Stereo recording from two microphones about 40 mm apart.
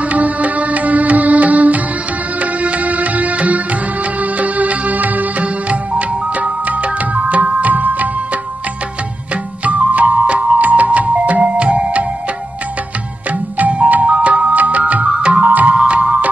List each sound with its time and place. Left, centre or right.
0.0 s music: right
9.3 s music: right
13.3 s music: right
14.0 s music: right
14.5 s music: right
15.0 s music: right
15.4 s music: right
15.7 s music: right